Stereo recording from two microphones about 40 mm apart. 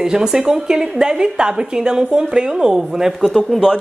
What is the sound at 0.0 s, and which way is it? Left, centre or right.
A woman's voice, centre.